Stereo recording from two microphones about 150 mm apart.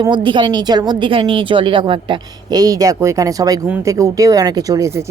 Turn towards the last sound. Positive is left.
turn(degrees=-20)  # may be behind; listen again after turning